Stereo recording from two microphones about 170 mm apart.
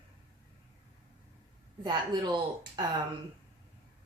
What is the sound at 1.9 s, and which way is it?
Speech, 25° right (ahead or behind).